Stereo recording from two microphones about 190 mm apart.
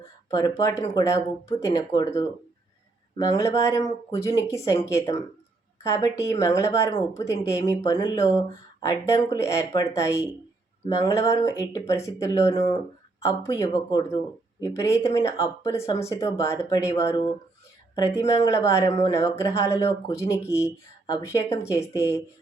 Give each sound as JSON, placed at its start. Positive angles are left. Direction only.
{"t": 0.3, "sound": "speech", "side_deg": 20}